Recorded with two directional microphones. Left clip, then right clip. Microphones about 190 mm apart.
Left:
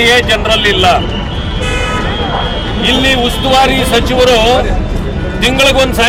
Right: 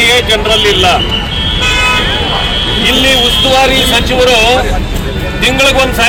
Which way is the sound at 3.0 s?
15° left (ahead or behind).